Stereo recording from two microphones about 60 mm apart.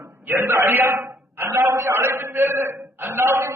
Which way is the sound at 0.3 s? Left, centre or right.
Right.